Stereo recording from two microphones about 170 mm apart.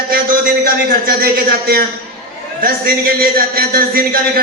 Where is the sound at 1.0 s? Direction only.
60° right (ahead or behind).